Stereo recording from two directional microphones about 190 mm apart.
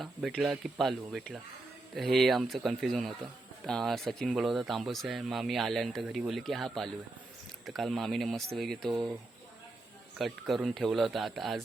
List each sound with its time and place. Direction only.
0.0 s speech: centre (ahead or behind)
10.2 s speech: centre (ahead or behind)